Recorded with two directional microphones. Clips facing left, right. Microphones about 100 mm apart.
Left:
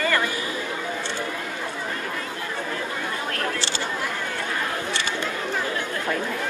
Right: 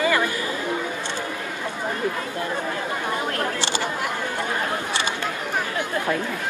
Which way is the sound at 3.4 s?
15° right (ahead or behind).